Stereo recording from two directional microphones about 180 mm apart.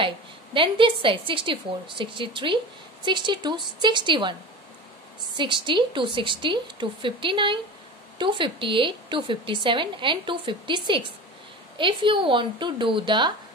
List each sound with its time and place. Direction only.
0.0 s a woman's voice: 30° right (ahead or behind)